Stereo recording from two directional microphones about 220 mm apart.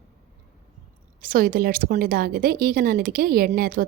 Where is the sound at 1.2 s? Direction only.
40° right (ahead or behind).